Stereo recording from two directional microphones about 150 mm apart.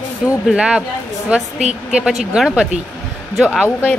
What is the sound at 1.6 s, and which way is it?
Speech, 50° right (ahead or behind).